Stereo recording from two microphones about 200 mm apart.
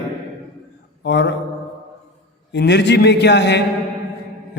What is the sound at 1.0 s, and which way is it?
Speech, 60° left (ahead or behind).